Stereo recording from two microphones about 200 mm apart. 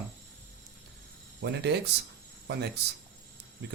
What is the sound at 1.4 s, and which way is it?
Speech, 60° right (ahead or behind).